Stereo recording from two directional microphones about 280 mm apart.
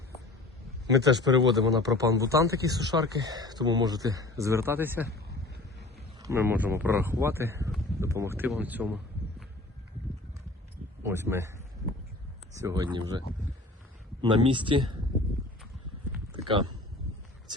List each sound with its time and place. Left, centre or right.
0.9 s a man's voice: centre
6.2 s a man's voice: centre
11.0 s a man's voice: centre
12.5 s a man's voice: centre